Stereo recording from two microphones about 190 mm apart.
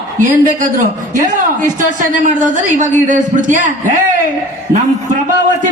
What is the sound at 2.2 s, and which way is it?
A man's voice, 40° right (ahead or behind).